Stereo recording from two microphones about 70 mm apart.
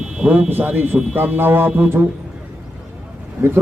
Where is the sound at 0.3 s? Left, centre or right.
Right.